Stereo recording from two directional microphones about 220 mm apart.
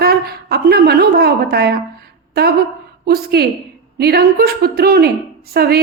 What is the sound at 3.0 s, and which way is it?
Speech, 45° right (ahead or behind).